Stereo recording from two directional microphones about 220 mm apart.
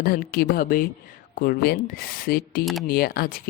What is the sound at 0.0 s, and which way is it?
Speech, 40° left (ahead or behind).